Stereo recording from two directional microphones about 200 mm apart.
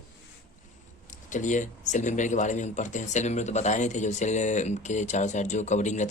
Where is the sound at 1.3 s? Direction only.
40° left (ahead or behind).